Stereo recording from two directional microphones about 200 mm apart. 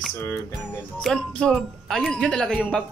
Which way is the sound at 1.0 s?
Centre (ahead or behind).